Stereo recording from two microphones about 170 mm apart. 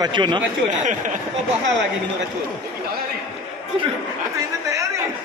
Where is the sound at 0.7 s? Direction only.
45° right (ahead or behind).